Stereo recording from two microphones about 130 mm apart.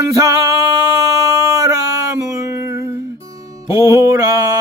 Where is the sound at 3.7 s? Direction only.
20° right (ahead or behind).